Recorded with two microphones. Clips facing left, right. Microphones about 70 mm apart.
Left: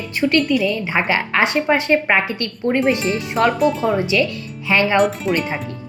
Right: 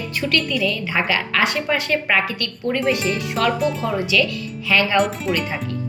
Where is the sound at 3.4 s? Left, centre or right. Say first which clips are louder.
Left 4 dB; centre.